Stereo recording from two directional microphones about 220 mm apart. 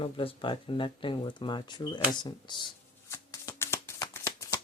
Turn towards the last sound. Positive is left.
turn(degrees=15)  # may be behind; listen again after turning